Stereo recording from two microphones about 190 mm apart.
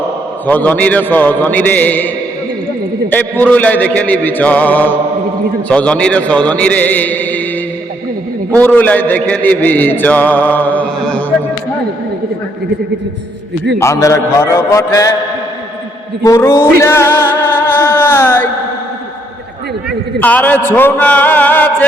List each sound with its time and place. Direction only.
0.4 s a man's voice: 10° left (ahead or behind)
3.4 s a man's voice: 10° left (ahead or behind)
8.5 s a man's voice: 10° left (ahead or behind)
13.7 s a man's voice: 15° left (ahead or behind)
16.2 s a man's voice: 15° left (ahead or behind)
16.8 s music: 15° left (ahead or behind)
20.1 s a man's voice: 10° left (ahead or behind)